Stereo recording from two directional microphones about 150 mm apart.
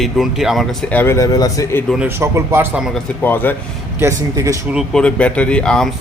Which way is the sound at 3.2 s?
10° left (ahead or behind).